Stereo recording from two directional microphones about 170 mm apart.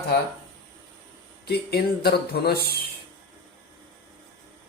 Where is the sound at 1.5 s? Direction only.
70° left (ahead or behind).